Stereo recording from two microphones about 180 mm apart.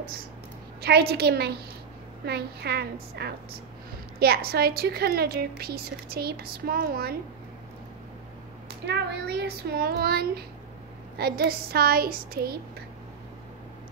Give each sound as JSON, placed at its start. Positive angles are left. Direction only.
{"t": 0.7, "sound": "speech", "side_deg": -65}
{"t": 8.6, "sound": "speech", "side_deg": -65}